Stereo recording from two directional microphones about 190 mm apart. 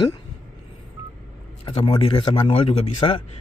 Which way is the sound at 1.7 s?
30° left (ahead or behind).